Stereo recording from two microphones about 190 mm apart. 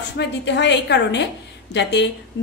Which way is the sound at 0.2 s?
65° left (ahead or behind).